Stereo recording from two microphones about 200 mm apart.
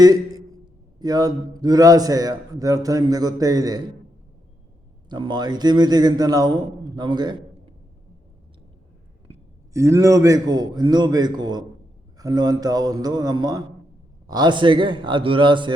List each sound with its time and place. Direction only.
0.0 s a man's voice: 20° right (ahead or behind)
5.0 s a man's voice: 20° right (ahead or behind)
9.7 s a man's voice: 15° right (ahead or behind)